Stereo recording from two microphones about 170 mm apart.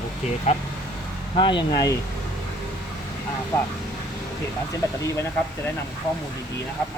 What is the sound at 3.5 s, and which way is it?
Speech, 15° left (ahead or behind).